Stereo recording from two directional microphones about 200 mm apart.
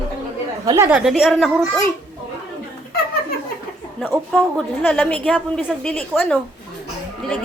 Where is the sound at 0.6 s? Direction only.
15° right (ahead or behind).